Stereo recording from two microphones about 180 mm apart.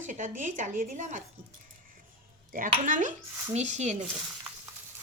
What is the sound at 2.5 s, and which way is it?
A woman's voice, 45° right (ahead or behind).